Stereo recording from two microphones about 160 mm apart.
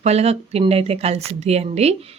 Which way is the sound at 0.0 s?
40° right (ahead or behind).